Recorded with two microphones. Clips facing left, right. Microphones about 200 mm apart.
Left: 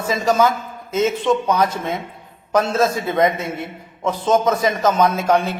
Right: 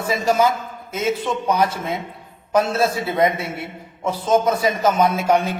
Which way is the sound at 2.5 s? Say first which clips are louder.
Left 1 dB; 10° right (ahead or behind).